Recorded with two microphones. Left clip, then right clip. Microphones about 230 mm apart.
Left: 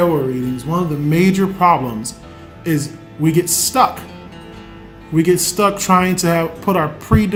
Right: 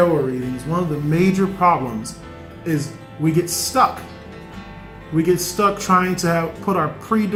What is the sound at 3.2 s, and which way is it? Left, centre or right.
Speech, left.